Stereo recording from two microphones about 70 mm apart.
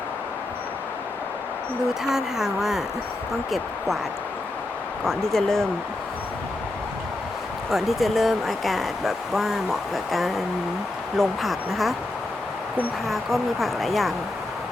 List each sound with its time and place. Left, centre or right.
2.0 s speech: centre
5.0 s speech: centre
7.7 s speech: centre
13.1 s speech: centre